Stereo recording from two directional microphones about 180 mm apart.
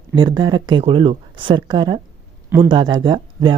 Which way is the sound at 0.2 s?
25° right (ahead or behind).